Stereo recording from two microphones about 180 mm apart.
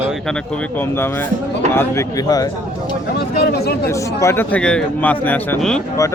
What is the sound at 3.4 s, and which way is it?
Speech, 65° left (ahead or behind).